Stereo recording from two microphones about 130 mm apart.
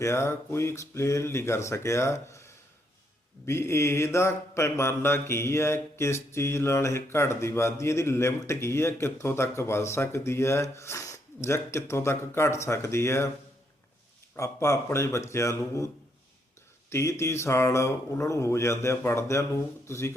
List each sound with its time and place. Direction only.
0.0 s mantra: 20° left (ahead or behind)
14.3 s mantra: 20° left (ahead or behind)
16.9 s mantra: 20° left (ahead or behind)